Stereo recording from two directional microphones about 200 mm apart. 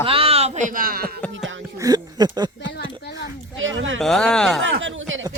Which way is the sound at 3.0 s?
55° left (ahead or behind).